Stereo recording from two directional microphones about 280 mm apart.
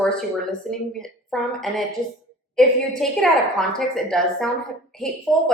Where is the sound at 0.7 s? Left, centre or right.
Centre.